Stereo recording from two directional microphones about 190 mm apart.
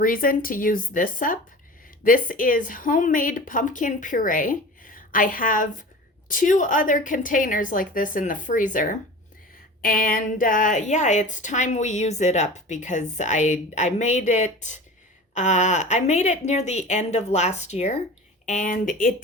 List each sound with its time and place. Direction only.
0.0 s a woman's voice: 50° left (ahead or behind)